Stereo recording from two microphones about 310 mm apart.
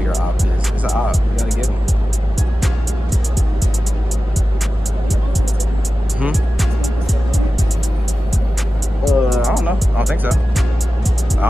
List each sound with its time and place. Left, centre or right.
6.2 s music: centre
9.0 s music: centre